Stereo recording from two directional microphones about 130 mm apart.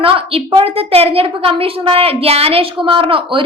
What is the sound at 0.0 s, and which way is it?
A woman's voice, 45° right (ahead or behind).